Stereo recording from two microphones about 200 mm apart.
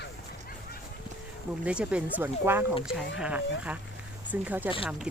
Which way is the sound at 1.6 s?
5° right (ahead or behind).